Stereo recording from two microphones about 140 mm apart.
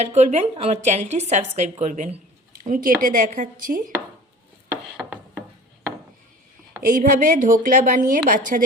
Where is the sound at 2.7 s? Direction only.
80° right.